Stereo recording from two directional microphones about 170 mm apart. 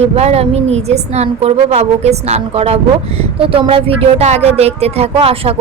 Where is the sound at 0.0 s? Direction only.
40° right (ahead or behind).